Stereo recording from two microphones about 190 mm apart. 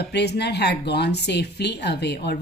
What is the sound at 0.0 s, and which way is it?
Speech, 60° left (ahead or behind).